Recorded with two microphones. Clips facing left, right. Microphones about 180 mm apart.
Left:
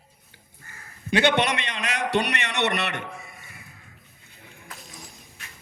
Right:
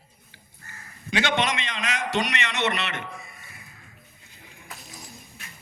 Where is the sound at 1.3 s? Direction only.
60° left (ahead or behind).